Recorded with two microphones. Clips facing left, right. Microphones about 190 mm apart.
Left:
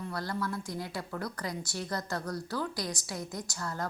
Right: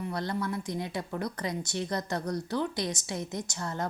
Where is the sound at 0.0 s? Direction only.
20° right (ahead or behind).